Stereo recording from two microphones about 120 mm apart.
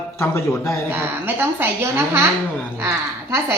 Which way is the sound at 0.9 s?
20° right (ahead or behind).